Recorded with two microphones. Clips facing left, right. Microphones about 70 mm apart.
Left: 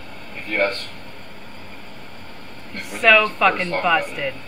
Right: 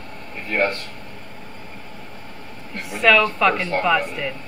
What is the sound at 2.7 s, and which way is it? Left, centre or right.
Speech, centre.